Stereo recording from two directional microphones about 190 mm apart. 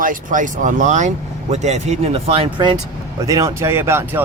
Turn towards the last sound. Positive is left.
turn(degrees=-15)  # may be behind; listen again after turning